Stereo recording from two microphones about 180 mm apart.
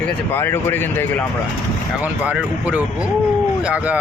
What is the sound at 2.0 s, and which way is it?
Speech, 5° right (ahead or behind).